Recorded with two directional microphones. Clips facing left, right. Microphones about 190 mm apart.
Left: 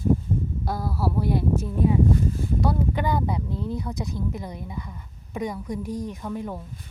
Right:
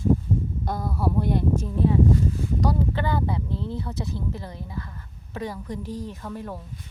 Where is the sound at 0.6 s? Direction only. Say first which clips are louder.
Even; 5° left (ahead or behind).